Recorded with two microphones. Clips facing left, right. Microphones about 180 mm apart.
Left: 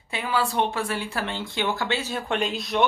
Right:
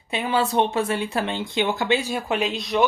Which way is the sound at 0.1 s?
20° right (ahead or behind).